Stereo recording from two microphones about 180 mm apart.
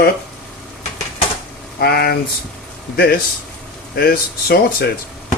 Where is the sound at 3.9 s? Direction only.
55° left (ahead or behind).